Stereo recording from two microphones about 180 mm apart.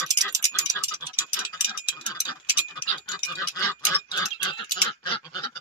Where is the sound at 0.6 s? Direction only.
15° right (ahead or behind).